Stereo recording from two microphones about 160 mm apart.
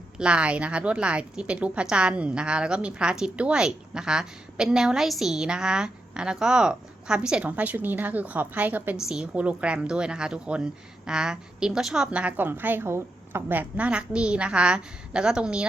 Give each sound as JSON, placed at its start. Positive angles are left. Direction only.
{"t": 0.2, "sound": "a woman's voice", "side_deg": -5}